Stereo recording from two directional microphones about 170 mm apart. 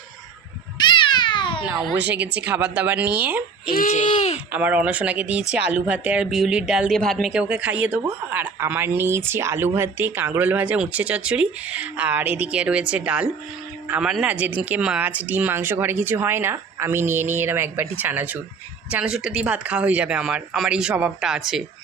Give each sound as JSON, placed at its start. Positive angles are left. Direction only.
{"t": 0.8, "sound": "cat", "side_deg": 30}
{"t": 1.6, "sound": "speech", "side_deg": -10}
{"t": 3.7, "sound": "speech", "side_deg": 50}
{"t": 4.5, "sound": "speech", "side_deg": -10}